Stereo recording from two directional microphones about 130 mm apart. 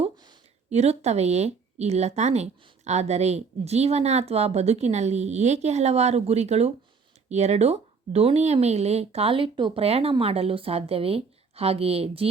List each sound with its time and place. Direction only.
0.7 s a woman's voice: 55° right (ahead or behind)